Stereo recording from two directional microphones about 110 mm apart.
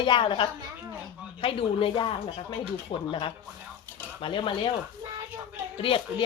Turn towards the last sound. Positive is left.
turn(degrees=55)  # may be behind; listen again after turning